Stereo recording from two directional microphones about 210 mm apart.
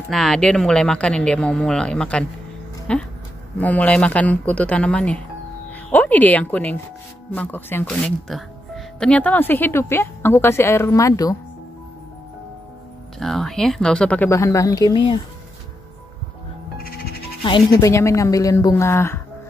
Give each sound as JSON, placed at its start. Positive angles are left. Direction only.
{"t": 0.1, "sound": "speech", "side_deg": 0}
{"t": 13.2, "sound": "speech", "side_deg": 0}
{"t": 17.4, "sound": "speech", "side_deg": 25}